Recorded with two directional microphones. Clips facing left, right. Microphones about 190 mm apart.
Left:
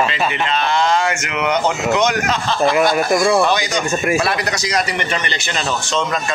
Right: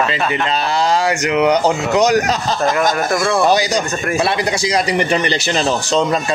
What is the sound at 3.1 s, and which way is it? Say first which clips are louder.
Speech: left 2 dB; 15° left (ahead or behind).